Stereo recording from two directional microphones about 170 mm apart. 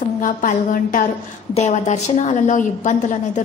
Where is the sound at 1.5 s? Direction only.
45° left (ahead or behind).